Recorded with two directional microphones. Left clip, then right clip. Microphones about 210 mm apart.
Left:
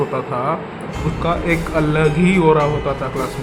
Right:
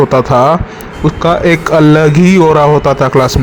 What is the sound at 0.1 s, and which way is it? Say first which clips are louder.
Speech: right 13 dB; 45° right (ahead or behind).